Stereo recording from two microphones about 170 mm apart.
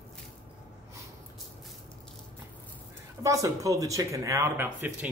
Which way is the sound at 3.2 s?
20° right (ahead or behind).